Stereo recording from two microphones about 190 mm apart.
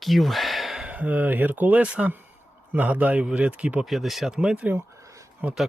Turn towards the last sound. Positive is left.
turn(degrees=-10)  # may be behind; listen again after turning